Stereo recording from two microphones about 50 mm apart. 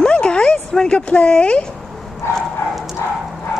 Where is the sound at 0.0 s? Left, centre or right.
Centre.